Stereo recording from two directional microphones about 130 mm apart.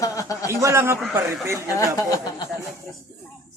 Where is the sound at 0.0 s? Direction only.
25° left (ahead or behind).